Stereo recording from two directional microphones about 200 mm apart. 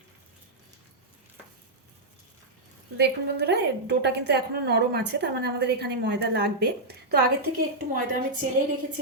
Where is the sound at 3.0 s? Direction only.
55° right (ahead or behind).